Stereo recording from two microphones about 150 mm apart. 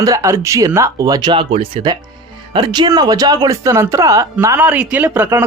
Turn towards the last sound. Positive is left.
turn(degrees=-15)  # may be behind; listen again after turning